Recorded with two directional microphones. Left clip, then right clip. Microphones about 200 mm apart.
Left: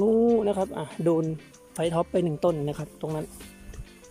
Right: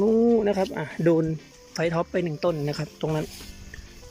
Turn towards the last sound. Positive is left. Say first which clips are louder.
# right 4 dB
turn(degrees=0)  # may be behind; listen again after turning